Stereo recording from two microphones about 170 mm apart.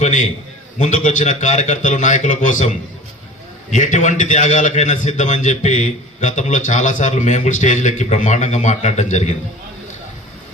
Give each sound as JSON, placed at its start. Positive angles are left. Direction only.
{"t": 0.0, "sound": "a man's voice", "side_deg": 45}